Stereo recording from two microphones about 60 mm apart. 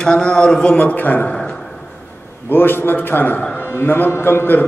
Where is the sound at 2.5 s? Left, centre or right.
Left.